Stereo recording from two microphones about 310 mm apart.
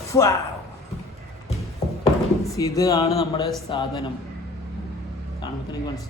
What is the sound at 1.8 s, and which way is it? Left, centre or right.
Music, centre.